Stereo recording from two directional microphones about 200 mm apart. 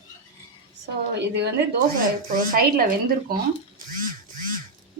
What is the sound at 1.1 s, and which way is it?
Speech, 55° right (ahead or behind).